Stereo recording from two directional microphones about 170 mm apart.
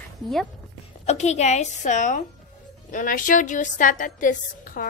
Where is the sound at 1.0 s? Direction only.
40° left (ahead or behind).